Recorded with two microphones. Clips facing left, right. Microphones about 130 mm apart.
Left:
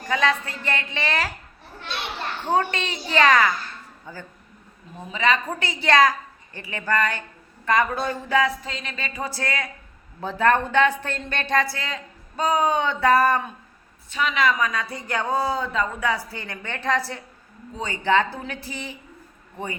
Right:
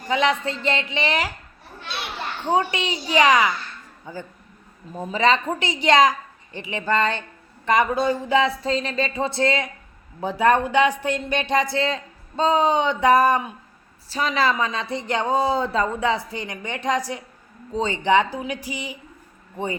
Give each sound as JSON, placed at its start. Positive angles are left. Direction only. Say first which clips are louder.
{"t": 0.1, "sound": "a woman's voice", "louder": "right 2 dB", "side_deg": -20}
{"t": 2.4, "sound": "a woman's voice", "louder": "right 1 dB", "side_deg": -15}
{"t": 4.9, "sound": "a woman's voice", "louder": "right 3 dB", "side_deg": -40}
{"t": 14.1, "sound": "a woman's voice", "louder": "right 1 dB", "side_deg": -35}